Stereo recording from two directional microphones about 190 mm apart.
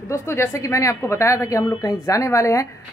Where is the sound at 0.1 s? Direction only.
15° left (ahead or behind).